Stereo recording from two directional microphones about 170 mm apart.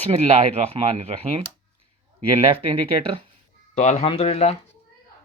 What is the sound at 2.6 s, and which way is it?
Speech, 35° right (ahead or behind).